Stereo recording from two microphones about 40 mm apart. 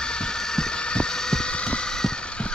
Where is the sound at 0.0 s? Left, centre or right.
Left.